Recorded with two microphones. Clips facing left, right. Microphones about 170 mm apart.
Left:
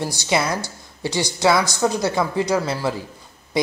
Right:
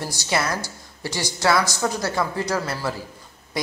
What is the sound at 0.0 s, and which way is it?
A woman's voice, 15° left (ahead or behind).